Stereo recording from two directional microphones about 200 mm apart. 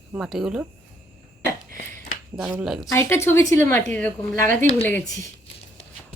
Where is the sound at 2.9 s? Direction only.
10° left (ahead or behind).